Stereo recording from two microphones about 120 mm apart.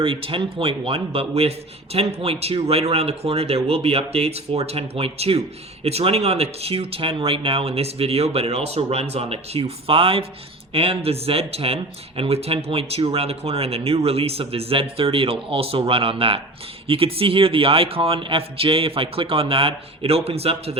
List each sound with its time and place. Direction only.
0.0 s a man's voice: 50° right (ahead or behind)